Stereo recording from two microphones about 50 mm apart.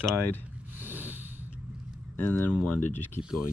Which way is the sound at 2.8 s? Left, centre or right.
Left.